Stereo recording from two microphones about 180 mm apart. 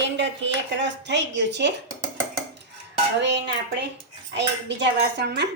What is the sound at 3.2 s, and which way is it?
Speech, 70° right (ahead or behind).